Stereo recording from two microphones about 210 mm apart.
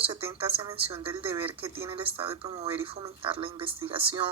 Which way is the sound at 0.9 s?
25° right (ahead or behind).